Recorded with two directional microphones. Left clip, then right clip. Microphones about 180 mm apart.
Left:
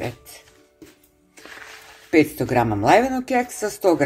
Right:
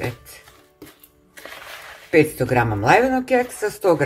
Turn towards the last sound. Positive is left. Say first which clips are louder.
# right 1 dB
turn(degrees=30)  # may be behind; listen again after turning